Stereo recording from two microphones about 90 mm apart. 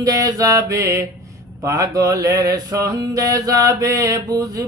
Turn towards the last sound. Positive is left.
turn(degrees=-40)  # may be behind; listen again after turning